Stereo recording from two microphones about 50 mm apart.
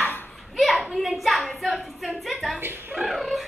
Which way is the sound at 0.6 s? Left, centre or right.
Centre.